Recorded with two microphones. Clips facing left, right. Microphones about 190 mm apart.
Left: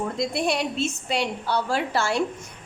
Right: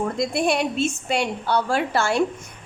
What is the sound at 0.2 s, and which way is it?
A woman's voice, 55° right (ahead or behind).